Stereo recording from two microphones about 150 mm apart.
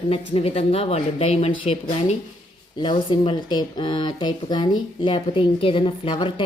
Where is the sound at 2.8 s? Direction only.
30° left (ahead or behind).